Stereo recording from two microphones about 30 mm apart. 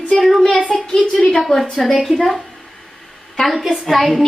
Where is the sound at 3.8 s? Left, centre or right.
Centre.